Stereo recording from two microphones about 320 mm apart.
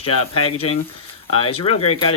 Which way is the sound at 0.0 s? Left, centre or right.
Centre.